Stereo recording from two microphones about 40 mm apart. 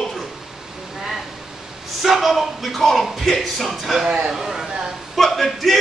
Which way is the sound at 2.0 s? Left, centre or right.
Centre.